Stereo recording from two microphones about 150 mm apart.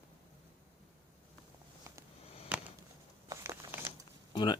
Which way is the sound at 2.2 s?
40° left (ahead or behind).